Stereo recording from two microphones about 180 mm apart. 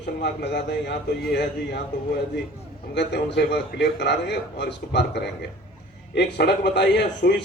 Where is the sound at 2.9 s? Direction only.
70° left (ahead or behind).